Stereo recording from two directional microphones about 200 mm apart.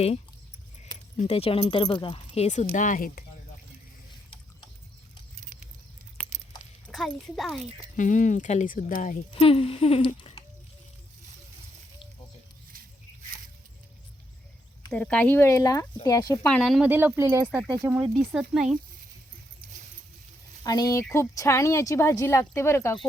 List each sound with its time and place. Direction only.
1.1 s speech: 30° left (ahead or behind)
5.4 s patter: 40° right (ahead or behind)
6.2 s a sound: 5° left (ahead or behind)
6.9 s speech: centre (ahead or behind)
7.9 s speech: 40° left (ahead or behind)
9.3 s speech: 30° left (ahead or behind)
14.8 s speech: 5° left (ahead or behind)
20.7 s speech: 20° left (ahead or behind)